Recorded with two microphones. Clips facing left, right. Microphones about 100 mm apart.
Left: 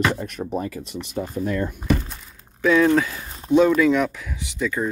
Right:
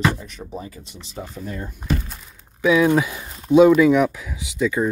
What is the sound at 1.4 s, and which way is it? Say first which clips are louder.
Speech: left 4 dB; 80° left.